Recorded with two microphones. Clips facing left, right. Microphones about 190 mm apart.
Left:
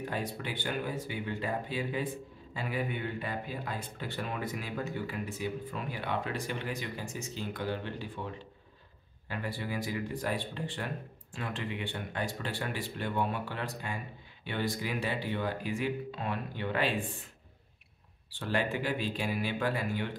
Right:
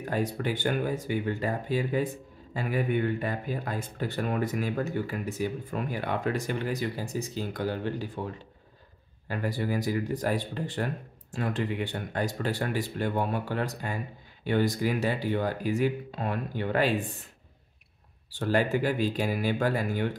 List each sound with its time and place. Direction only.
0.1 s speech: 45° right (ahead or behind)
9.3 s speech: 40° right (ahead or behind)
18.3 s speech: 40° right (ahead or behind)